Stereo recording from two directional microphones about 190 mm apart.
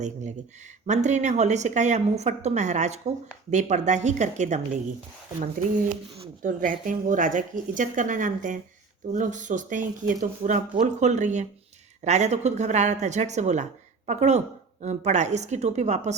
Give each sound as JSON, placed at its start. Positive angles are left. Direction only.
{"t": 0.0, "sound": "speech", "side_deg": -40}
{"t": 6.4, "sound": "speech", "side_deg": -45}